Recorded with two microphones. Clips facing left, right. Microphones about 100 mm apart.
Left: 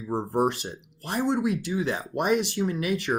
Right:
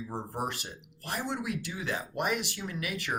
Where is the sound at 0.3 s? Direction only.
25° left (ahead or behind).